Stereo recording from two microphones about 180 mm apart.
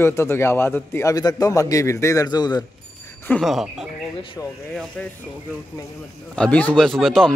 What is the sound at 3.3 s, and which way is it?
Speech, centre (ahead or behind).